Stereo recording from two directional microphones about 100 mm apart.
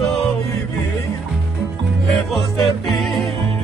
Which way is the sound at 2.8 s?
Centre (ahead or behind).